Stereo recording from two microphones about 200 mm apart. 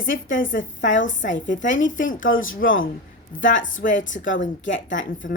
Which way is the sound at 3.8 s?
40° left (ahead or behind).